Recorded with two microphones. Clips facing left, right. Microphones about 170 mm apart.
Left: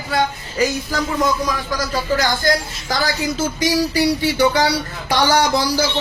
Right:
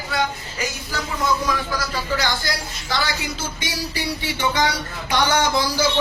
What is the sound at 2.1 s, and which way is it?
Speech, 45° left (ahead or behind).